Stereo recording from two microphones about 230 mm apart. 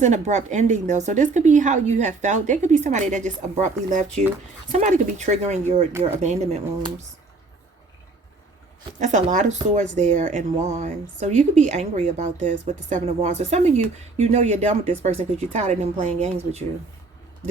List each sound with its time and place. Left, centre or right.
0.0 s speech: right
9.0 s speech: right